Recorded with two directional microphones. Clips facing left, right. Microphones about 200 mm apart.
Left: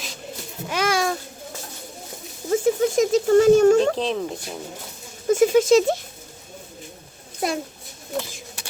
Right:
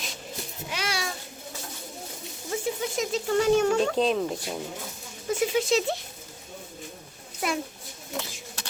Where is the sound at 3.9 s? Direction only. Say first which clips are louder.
Right 1 dB; centre (ahead or behind).